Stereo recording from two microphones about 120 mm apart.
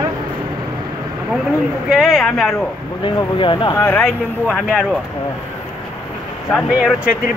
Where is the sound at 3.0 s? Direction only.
45° left (ahead or behind).